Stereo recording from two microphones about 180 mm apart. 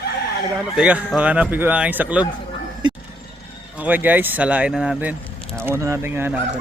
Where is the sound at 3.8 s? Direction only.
10° right (ahead or behind).